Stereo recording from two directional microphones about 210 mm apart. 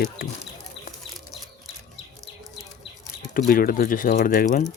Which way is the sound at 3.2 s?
45° left (ahead or behind).